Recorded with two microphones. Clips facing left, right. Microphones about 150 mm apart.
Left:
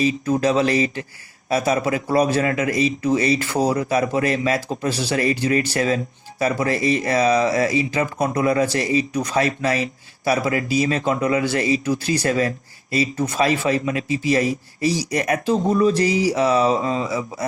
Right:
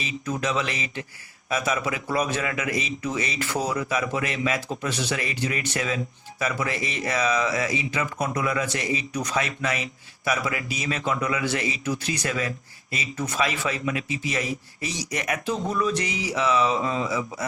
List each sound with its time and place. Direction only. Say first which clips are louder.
0.0 s speech: left 10 dB; 35° left (ahead or behind)